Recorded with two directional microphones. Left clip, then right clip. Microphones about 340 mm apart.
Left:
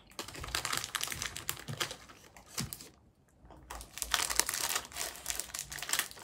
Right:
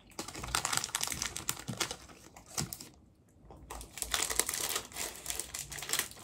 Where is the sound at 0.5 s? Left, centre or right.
Right.